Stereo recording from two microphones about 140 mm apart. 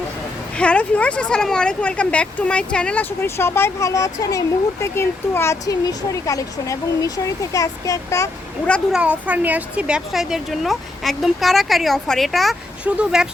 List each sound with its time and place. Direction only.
0.5 s speech: 10° left (ahead or behind)
8.9 s speech: 10° right (ahead or behind)